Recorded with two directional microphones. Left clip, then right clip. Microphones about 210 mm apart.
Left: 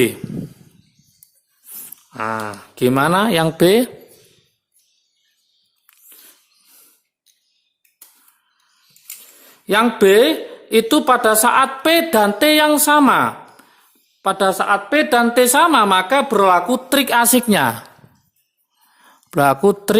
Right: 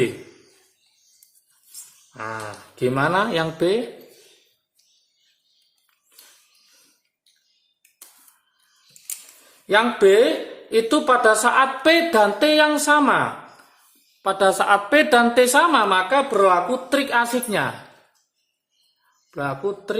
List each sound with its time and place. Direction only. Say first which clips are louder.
2.1 s a woman's voice: left 8 dB; 45° left (ahead or behind)
9.6 s a woman's voice: left 2 dB; 40° left (ahead or behind)
19.3 s speech: left 12 dB; 50° left (ahead or behind)